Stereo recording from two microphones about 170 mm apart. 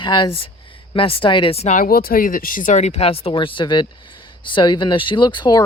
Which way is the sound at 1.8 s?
60° left (ahead or behind).